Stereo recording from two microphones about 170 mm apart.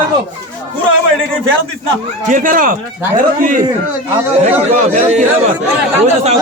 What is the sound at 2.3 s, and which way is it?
Speech, 55° right (ahead or behind).